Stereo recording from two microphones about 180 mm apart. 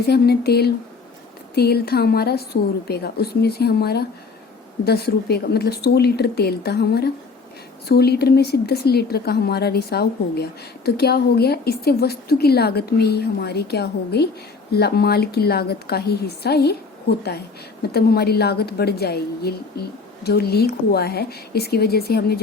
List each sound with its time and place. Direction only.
0.0 s a woman's voice: 65° left (ahead or behind)